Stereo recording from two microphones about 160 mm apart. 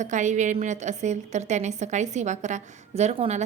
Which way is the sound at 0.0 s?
50° right (ahead or behind).